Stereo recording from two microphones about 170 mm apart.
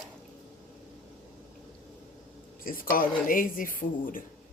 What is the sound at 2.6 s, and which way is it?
Speech, 55° left (ahead or behind).